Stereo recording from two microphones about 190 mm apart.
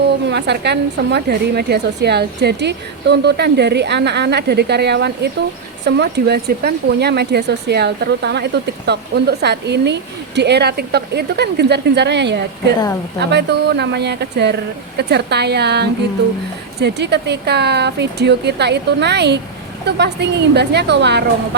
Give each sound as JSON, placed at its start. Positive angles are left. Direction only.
{"t": 0.3, "sound": "speech", "side_deg": -65}